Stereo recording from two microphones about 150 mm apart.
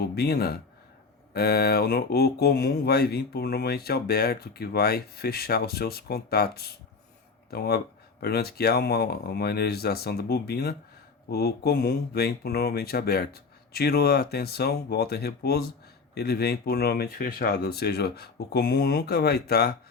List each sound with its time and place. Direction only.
0.0 s speech: 90° left